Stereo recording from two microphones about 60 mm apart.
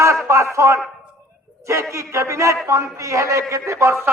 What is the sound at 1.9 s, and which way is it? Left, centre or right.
A man's voice, right.